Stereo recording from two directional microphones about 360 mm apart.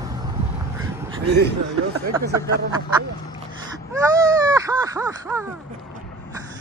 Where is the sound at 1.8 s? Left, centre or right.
Right.